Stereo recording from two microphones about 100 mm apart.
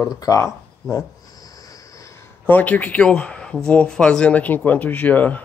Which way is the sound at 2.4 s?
15° left (ahead or behind).